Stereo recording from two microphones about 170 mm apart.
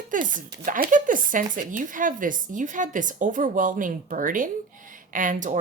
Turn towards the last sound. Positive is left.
turn(degrees=-50)  # may be behind; listen again after turning